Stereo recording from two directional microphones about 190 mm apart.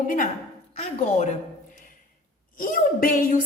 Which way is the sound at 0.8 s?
35° left (ahead or behind).